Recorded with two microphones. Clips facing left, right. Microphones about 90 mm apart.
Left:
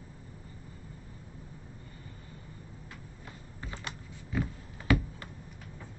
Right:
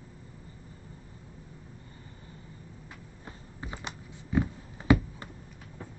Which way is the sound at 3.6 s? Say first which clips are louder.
Right 2 dB; 20° right (ahead or behind).